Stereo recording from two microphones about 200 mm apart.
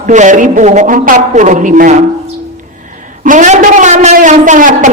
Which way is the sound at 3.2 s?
40° right (ahead or behind).